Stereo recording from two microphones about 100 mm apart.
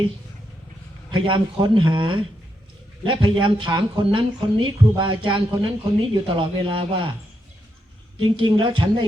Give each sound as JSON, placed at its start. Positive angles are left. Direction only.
{"t": 1.1, "sound": "speech", "side_deg": -55}
{"t": 8.2, "sound": "speech", "side_deg": -60}